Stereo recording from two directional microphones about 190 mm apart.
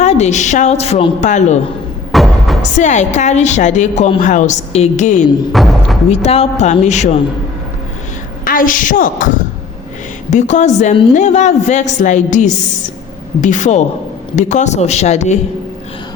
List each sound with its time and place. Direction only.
0.0 s a woman's voice: 35° left (ahead or behind)
2.1 s music: centre (ahead or behind)
2.6 s a woman's voice: 40° left (ahead or behind)
5.5 s speech: centre (ahead or behind)
6.1 s a woman's voice: 35° left (ahead or behind)
8.4 s a woman's voice: 45° left (ahead or behind)